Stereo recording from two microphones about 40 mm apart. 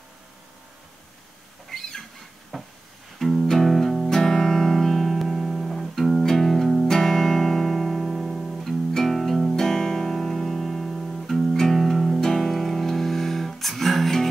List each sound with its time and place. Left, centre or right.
1.8 s a sound: centre
3.2 s music: centre
9.6 s music: centre